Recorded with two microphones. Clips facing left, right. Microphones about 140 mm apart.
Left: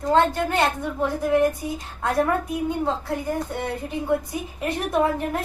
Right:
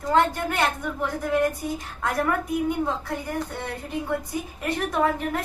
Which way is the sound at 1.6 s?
15° left (ahead or behind).